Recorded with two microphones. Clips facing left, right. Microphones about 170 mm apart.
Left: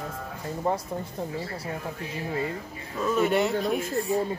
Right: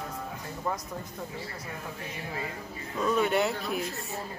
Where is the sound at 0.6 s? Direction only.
30° left (ahead or behind).